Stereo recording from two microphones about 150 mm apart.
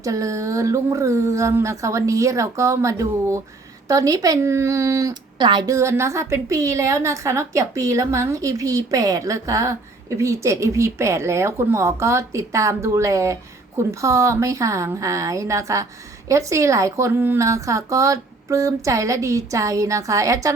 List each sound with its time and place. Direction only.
0.0 s speech: 20° right (ahead or behind)